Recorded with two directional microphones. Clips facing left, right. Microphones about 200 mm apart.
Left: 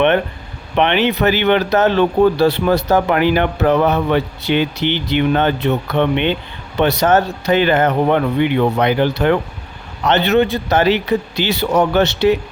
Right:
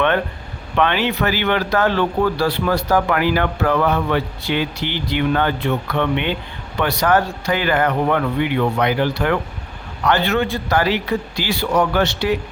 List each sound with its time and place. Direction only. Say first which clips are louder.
0.8 s speech: left 3 dB; 20° left (ahead or behind)